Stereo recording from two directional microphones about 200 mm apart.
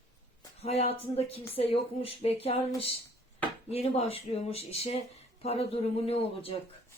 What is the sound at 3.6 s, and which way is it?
Speech, 30° left (ahead or behind).